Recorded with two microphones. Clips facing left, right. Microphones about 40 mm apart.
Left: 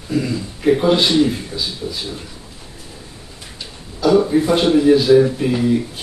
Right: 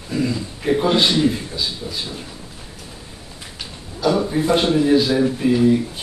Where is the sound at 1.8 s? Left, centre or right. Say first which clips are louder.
Left 3 dB; centre.